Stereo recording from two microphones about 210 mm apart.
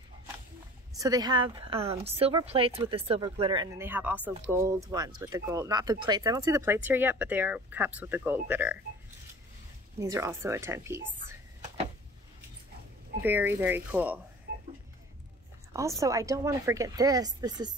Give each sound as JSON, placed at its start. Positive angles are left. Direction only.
{"t": 0.9, "sound": "speech", "side_deg": -15}
{"t": 9.9, "sound": "speech", "side_deg": -15}
{"t": 13.2, "sound": "speech", "side_deg": -10}
{"t": 15.7, "sound": "speech", "side_deg": -15}